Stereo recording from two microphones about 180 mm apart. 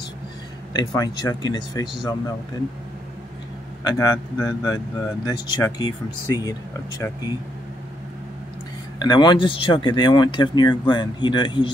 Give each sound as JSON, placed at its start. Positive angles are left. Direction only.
{"t": 0.7, "sound": "speech", "side_deg": 20}
{"t": 3.8, "sound": "speech", "side_deg": 20}
{"t": 9.0, "sound": "speech", "side_deg": 25}